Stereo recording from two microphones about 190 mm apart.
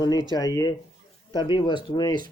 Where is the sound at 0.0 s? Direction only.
20° left (ahead or behind).